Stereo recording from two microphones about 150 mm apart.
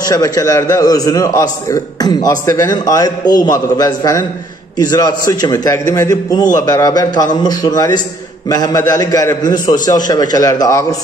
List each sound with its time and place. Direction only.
0.1 s a man's voice: 25° left (ahead or behind)